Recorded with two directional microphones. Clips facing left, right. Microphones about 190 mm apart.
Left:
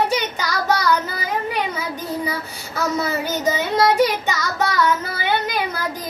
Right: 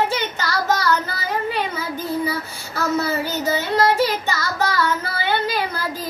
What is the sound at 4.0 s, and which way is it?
Child singing, 15° left (ahead or behind).